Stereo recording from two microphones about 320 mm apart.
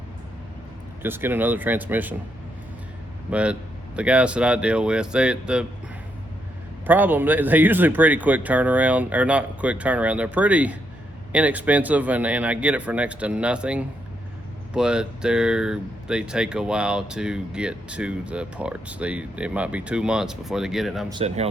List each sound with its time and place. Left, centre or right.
1.0 s speech: centre
3.2 s speech: centre
6.8 s speech: centre
21.1 s speech: centre